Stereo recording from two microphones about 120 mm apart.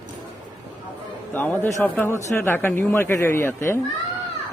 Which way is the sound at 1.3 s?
15° left (ahead or behind).